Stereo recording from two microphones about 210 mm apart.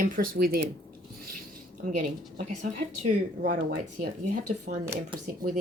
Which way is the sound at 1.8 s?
40° right (ahead or behind).